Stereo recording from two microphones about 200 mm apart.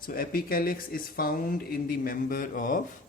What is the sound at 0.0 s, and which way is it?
Speech, 45° left (ahead or behind).